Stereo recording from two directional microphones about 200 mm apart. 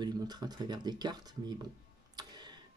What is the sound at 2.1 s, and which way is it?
Tick, 20° right (ahead or behind).